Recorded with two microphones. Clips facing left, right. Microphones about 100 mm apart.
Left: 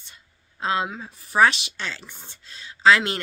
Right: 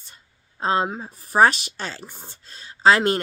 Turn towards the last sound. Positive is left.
turn(degrees=-40)  # may be behind; listen again after turning